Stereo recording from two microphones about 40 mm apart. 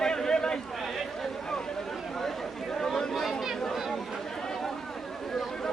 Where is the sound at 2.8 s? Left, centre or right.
Centre.